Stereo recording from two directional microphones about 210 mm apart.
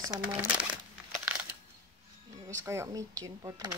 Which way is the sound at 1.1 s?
5° right (ahead or behind).